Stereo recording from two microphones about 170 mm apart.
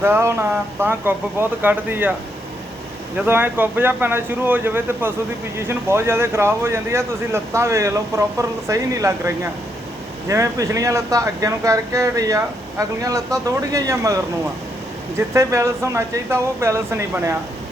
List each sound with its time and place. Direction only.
0.0 s speech: 15° right (ahead or behind)
3.2 s speech: 10° right (ahead or behind)
15.3 s speech: 15° right (ahead or behind)